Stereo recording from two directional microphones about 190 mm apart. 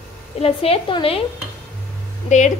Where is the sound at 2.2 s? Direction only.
40° left (ahead or behind).